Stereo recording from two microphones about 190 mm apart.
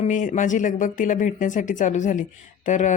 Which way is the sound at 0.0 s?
40° left (ahead or behind).